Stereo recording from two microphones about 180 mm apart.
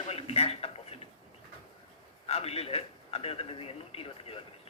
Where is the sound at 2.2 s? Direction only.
35° left (ahead or behind).